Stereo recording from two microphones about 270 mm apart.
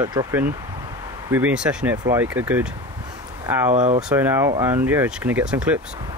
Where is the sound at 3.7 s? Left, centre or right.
Right.